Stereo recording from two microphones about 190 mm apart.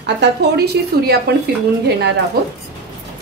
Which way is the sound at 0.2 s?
65° right (ahead or behind).